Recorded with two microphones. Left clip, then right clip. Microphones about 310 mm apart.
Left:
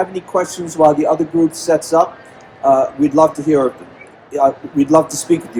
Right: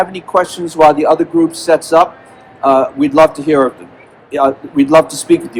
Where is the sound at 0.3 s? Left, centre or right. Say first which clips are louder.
Right 5 dB; right.